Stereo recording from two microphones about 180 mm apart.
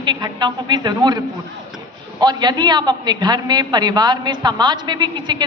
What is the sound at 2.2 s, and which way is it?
A woman's voice, 25° right (ahead or behind).